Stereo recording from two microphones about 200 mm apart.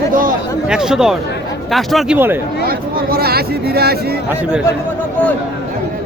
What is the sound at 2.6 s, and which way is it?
Speech, 50° right (ahead or behind).